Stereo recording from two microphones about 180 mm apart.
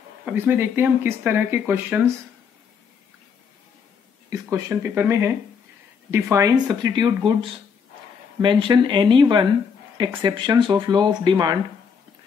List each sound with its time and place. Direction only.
0.2 s speech: 10° right (ahead or behind)
4.3 s speech: 15° right (ahead or behind)
8.4 s speech: 25° right (ahead or behind)